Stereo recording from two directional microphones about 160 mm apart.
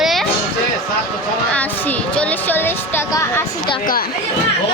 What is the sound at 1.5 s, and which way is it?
Music, 10° left (ahead or behind).